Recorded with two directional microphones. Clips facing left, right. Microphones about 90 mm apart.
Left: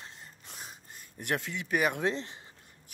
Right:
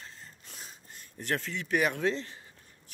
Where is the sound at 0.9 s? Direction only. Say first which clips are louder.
Even; 15° left (ahead or behind).